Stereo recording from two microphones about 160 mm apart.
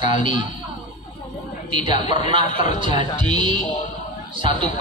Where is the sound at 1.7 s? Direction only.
30° right (ahead or behind).